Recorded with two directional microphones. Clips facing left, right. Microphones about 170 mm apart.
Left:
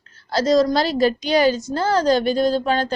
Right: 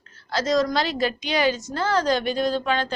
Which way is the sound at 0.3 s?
35° left (ahead or behind).